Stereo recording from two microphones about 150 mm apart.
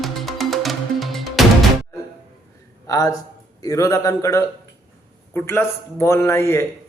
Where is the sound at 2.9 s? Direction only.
25° left (ahead or behind).